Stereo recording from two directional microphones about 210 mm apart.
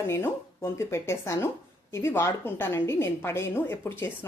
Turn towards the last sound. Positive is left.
turn(degrees=10)  # may be behind; listen again after turning